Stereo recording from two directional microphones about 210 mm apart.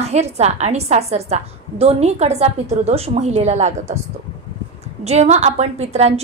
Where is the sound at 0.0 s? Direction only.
30° right (ahead or behind).